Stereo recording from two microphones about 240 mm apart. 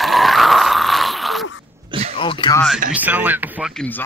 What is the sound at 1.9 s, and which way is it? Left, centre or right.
Throat clearing, right.